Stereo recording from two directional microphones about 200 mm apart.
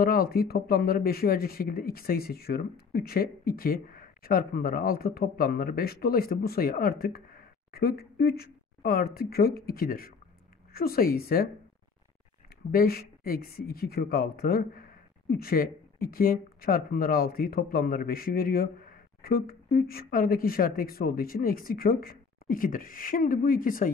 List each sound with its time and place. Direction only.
0.0 s speech: 50° left (ahead or behind)
12.7 s speech: 50° left (ahead or behind)